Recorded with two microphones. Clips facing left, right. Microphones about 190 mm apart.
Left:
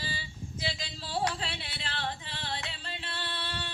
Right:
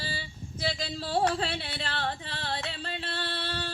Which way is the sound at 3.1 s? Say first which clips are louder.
Right 3 dB; 40° right (ahead or behind).